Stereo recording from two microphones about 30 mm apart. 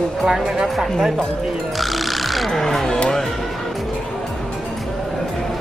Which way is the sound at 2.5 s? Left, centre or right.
Centre.